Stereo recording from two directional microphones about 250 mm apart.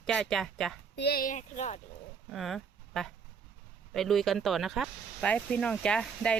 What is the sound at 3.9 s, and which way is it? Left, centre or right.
Speech, centre.